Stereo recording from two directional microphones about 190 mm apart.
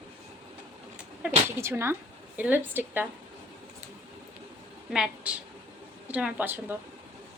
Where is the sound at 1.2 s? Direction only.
10° right (ahead or behind).